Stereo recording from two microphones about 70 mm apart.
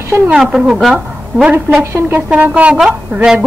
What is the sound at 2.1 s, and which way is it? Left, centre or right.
Speech, right.